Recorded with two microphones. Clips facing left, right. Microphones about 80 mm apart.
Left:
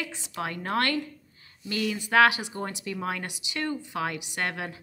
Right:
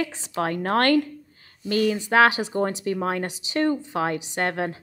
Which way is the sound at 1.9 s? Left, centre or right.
Right.